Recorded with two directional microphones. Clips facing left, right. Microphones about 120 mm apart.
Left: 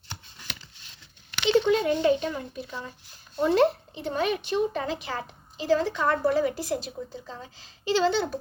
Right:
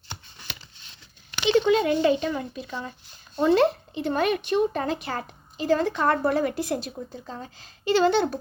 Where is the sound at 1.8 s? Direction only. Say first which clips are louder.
Right 1 dB; 90° right.